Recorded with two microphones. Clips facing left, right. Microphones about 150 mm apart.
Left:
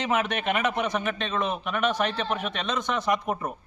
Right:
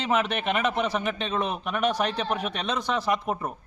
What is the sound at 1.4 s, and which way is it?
Speech, 35° right (ahead or behind).